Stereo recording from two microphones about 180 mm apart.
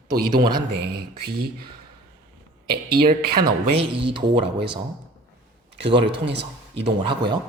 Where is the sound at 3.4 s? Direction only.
30° right (ahead or behind).